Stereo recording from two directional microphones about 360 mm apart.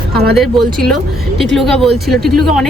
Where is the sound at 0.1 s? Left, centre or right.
Right.